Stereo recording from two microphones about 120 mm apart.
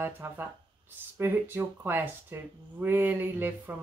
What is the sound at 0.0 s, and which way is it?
Speech, 15° right (ahead or behind).